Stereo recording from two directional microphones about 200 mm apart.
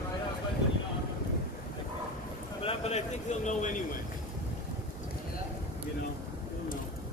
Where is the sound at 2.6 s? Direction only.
30° left (ahead or behind).